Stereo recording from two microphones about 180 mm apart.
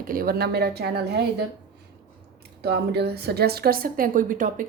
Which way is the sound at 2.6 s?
65° right (ahead or behind).